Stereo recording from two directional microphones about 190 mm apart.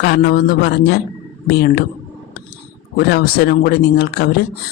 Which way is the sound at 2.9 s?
60° left (ahead or behind).